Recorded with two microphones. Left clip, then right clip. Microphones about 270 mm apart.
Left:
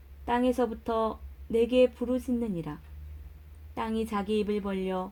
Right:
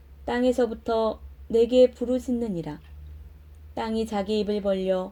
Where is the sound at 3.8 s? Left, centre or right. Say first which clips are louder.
Right 4 dB; centre.